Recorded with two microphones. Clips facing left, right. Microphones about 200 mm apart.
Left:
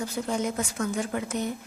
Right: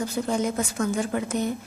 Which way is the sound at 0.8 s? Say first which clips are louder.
Right 4 dB; 45° right (ahead or behind).